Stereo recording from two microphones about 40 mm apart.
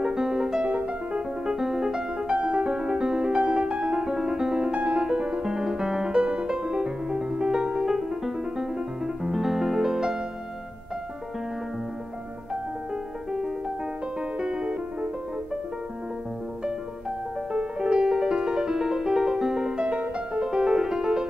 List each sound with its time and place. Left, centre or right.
0.0 s music: centre
0.7 s music: right
1.4 s music: centre
4.0 s music: centre
14.4 s piano: centre
17.5 s music: right
19.8 s music: right